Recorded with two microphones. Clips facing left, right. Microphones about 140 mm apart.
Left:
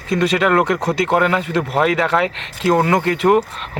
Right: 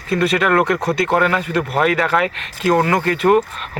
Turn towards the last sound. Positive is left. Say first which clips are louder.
# even
turn(degrees=20)  # may be behind; listen again after turning